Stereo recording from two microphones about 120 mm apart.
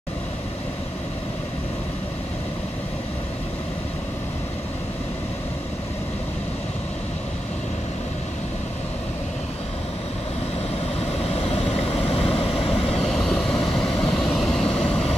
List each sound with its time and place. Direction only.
11.2 s vehicle: 55° left (ahead or behind)
13.0 s vehicle: 5° left (ahead or behind)